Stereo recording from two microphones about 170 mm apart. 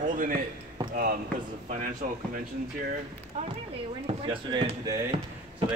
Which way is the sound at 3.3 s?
40° right (ahead or behind).